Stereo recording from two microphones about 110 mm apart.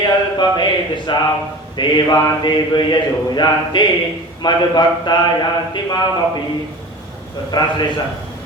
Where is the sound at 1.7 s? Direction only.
40° left (ahead or behind).